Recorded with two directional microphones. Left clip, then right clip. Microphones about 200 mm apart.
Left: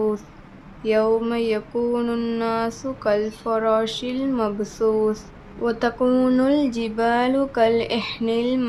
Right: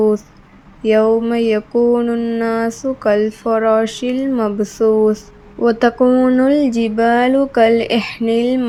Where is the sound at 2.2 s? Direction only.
10° right (ahead or behind).